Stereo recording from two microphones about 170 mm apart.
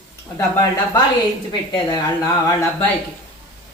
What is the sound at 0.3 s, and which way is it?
A woman's voice, 20° left (ahead or behind).